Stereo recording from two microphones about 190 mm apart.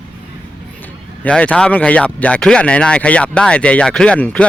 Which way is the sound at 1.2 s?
5° left (ahead or behind).